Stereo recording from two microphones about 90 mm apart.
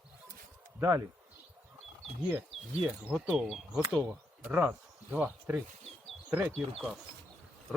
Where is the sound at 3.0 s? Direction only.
5° right (ahead or behind).